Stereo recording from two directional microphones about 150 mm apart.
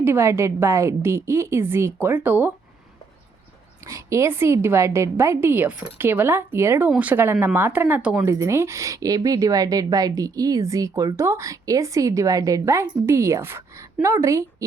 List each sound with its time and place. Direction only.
0.0 s a woman's voice: 15° right (ahead or behind)
3.8 s a woman's voice: 20° right (ahead or behind)